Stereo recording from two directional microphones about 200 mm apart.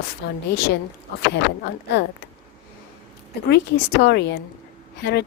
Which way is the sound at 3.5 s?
55° left (ahead or behind).